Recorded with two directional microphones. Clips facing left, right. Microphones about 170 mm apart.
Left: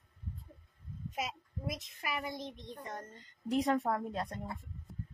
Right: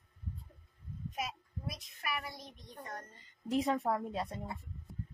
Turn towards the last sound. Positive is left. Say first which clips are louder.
# even
turn(degrees=-5)  # may be behind; listen again after turning